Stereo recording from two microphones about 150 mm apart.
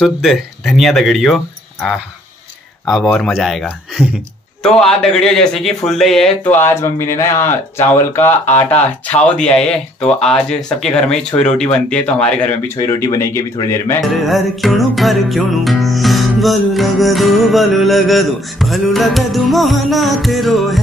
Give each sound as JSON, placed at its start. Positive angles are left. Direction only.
{"t": 0.0, "sound": "music", "side_deg": 0}
{"t": 4.6, "sound": "music", "side_deg": 5}
{"t": 6.5, "sound": "speech", "side_deg": 15}
{"t": 12.8, "sound": "speech", "side_deg": 20}
{"t": 14.2, "sound": "music", "side_deg": 0}